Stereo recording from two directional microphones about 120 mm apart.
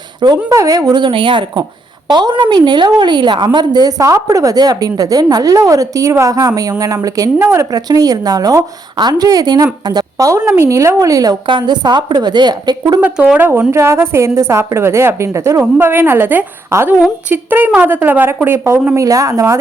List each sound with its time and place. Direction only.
0.2 s a woman's voice: 35° right (ahead or behind)
13.0 s a woman's voice: 10° right (ahead or behind); by 19.5 s 25° right (ahead or behind)